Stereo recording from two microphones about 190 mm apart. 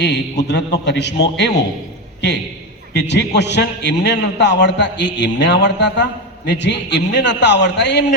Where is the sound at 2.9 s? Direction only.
65° left (ahead or behind).